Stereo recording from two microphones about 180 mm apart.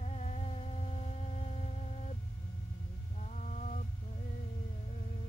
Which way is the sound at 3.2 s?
40° left (ahead or behind).